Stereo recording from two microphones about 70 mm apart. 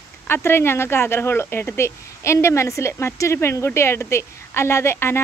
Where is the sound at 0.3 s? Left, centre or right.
Left.